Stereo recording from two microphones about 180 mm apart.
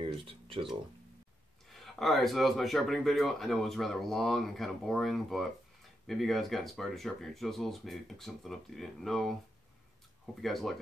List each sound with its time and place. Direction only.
0.0 s a sound: 30° right (ahead or behind)
1.7 s speech: centre (ahead or behind)
10.4 s speech: centre (ahead or behind)